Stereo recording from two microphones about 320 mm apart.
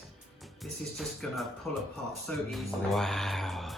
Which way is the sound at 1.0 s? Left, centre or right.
Centre.